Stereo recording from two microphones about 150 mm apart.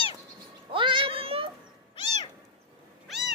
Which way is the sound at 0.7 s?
35° right (ahead or behind).